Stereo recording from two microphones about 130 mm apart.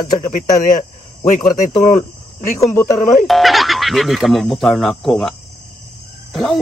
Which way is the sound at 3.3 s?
Centre (ahead or behind).